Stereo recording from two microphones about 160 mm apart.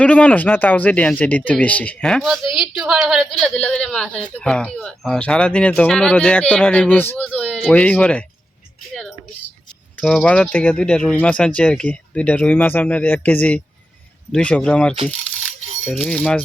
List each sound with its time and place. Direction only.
0.0 s speech: 10° left (ahead or behind)
10.0 s speech: 5° left (ahead or behind)
15.0 s rattle: 5° left (ahead or behind)